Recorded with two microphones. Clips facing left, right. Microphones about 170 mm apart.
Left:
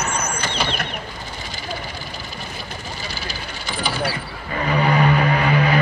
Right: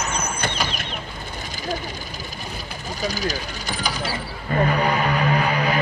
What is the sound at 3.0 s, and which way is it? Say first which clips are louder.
Speech: right 6 dB; 40° right (ahead or behind).